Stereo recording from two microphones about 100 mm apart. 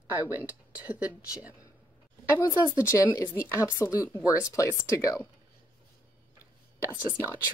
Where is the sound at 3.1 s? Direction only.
30° left (ahead or behind).